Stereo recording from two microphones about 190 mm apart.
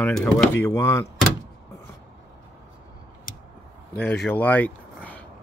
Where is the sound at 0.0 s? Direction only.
5° left (ahead or behind).